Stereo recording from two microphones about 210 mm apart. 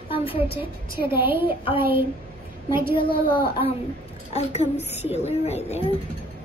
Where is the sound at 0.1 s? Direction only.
25° left (ahead or behind).